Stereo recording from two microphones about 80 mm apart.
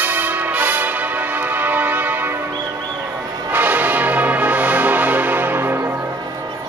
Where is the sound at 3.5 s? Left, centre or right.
Right.